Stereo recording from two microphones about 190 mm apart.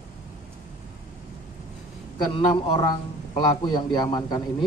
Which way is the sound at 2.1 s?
25° left (ahead or behind).